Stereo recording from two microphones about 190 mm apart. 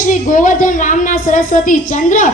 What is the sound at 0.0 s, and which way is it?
A woman's voice, 45° left (ahead or behind).